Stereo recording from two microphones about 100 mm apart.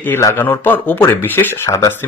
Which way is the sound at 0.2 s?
25° left (ahead or behind).